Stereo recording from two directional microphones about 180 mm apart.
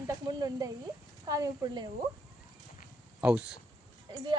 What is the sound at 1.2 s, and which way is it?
Speech, 20° right (ahead or behind).